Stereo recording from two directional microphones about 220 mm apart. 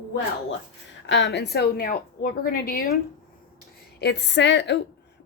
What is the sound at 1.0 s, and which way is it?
A woman's voice, 50° left (ahead or behind).